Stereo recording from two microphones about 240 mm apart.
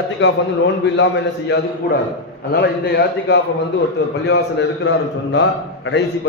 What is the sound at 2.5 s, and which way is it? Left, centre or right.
A man's voice, left.